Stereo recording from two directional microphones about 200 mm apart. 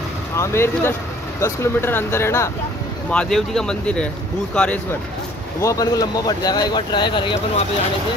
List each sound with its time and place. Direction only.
0.4 s speech: 15° left (ahead or behind)
5.6 s speech: 15° left (ahead or behind)